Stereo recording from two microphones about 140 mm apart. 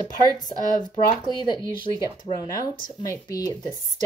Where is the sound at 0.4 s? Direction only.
30° left (ahead or behind).